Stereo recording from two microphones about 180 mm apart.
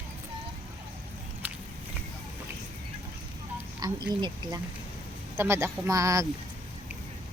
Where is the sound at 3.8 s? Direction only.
25° right (ahead or behind).